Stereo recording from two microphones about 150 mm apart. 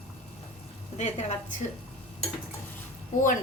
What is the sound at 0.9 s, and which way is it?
Speech, 50° left (ahead or behind).